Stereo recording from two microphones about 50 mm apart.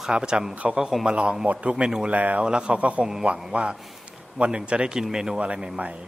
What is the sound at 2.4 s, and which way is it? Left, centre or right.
Speech, centre.